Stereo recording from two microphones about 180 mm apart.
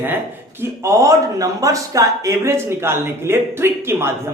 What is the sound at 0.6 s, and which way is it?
Speech, 15° right (ahead or behind).